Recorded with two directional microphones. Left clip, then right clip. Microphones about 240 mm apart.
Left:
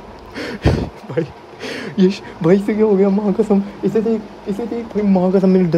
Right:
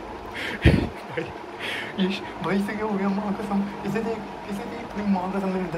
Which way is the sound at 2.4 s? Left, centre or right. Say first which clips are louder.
Left 14 dB; left.